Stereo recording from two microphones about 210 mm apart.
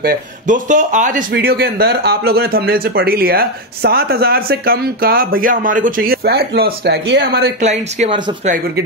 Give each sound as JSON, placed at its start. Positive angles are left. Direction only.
{"t": 0.0, "sound": "speech", "side_deg": -35}
{"t": 7.6, "sound": "speech", "side_deg": -30}